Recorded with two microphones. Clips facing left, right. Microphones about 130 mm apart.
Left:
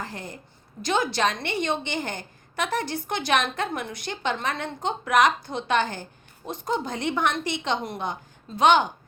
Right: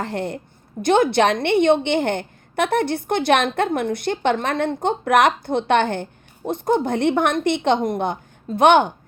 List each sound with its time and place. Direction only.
0.0 s a woman's voice: 65° right (ahead or behind)